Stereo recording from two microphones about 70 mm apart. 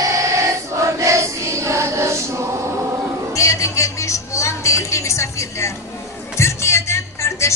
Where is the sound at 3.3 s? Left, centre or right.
Left.